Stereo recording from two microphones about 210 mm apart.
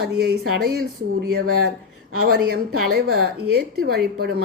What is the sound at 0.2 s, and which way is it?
Speech, 50° right (ahead or behind).